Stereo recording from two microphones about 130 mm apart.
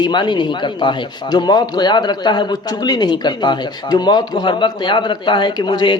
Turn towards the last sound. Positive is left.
turn(degrees=35)  # may be behind; listen again after turning